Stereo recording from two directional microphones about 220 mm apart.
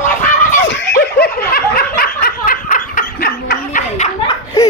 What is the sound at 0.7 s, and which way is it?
Snicker, 50° left (ahead or behind).